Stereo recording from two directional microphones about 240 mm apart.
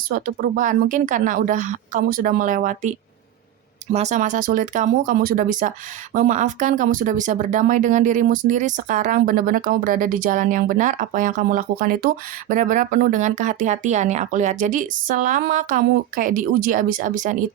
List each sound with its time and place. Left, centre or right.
0.1 s speech: right
3.9 s speech: right